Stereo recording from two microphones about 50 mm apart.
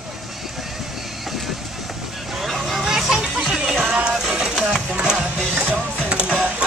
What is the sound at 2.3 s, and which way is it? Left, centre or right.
Music, centre.